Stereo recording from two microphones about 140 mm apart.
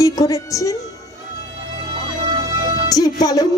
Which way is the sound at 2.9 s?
25° left (ahead or behind).